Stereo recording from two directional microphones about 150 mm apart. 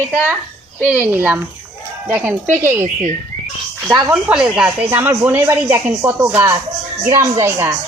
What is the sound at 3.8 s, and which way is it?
Speech, 20° right (ahead or behind).